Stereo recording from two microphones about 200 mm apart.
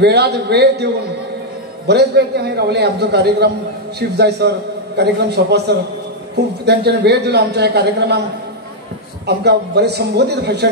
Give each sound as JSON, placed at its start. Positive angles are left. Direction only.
{"t": 0.0, "sound": "a man's voice", "side_deg": -55}
{"t": 1.9, "sound": "a man's voice", "side_deg": -55}
{"t": 9.2, "sound": "a man's voice", "side_deg": -55}